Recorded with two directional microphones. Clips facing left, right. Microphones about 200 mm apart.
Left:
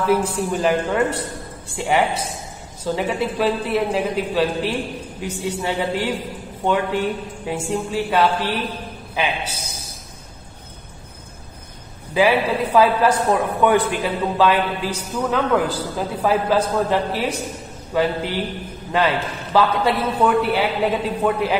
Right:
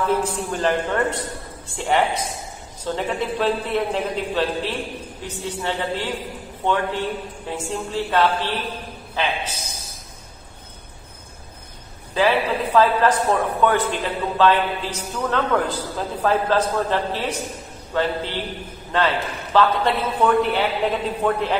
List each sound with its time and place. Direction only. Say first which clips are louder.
0.1 s a man's voice: left 3 dB; 10° left (ahead or behind)
12.1 s a man's voice: left 2 dB; 10° left (ahead or behind)